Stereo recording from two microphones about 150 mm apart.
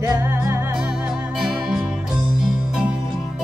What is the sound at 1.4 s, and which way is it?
Music, 5° right (ahead or behind).